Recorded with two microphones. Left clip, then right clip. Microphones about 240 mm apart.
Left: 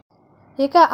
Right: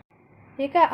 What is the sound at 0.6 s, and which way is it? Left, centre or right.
Speech, left.